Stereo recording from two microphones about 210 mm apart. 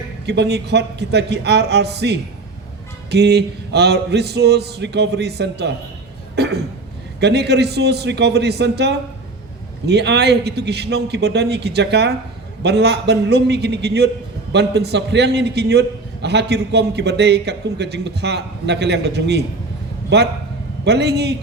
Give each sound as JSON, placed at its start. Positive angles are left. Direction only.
{"t": 0.3, "sound": "a man's voice", "side_deg": -50}
{"t": 6.3, "sound": "cough", "side_deg": -50}
{"t": 7.2, "sound": "a man's voice", "side_deg": -55}